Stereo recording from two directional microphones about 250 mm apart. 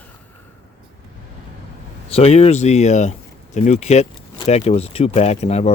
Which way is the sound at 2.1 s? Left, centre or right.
Left.